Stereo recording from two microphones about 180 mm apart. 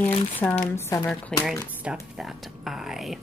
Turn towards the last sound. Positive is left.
turn(degrees=0)  # may be behind; listen again after turning